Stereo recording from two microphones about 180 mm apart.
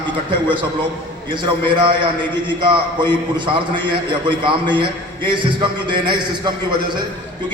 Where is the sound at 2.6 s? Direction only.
25° right (ahead or behind).